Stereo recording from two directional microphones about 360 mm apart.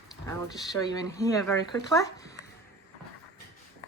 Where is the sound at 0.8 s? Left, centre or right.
Centre.